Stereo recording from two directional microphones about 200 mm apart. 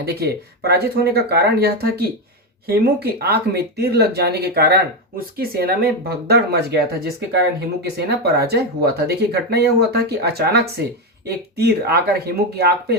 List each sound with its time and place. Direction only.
0.0 s speech: 50° right (ahead or behind)